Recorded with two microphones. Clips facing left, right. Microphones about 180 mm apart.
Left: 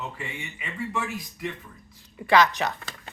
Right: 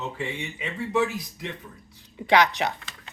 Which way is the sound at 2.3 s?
15° right (ahead or behind).